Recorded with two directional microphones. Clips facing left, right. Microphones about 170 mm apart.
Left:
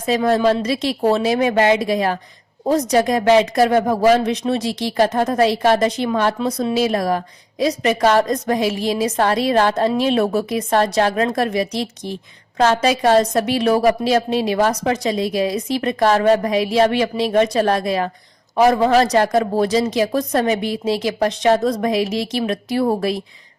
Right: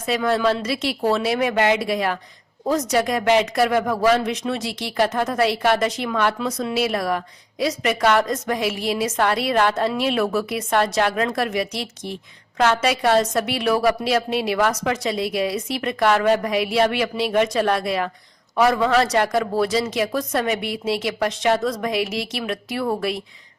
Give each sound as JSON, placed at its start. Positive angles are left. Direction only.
{"t": 0.0, "sound": "speech", "side_deg": 35}